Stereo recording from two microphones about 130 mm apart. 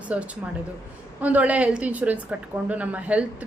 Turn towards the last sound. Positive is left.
turn(degrees=-10)  # may be behind; listen again after turning